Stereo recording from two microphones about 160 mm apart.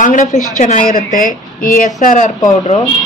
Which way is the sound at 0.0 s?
50° left (ahead or behind).